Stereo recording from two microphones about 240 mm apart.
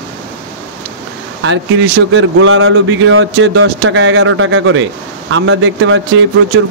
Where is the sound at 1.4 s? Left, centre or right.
Right.